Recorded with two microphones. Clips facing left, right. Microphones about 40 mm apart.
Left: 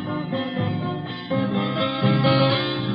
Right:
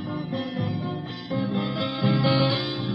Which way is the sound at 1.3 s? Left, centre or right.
Centre.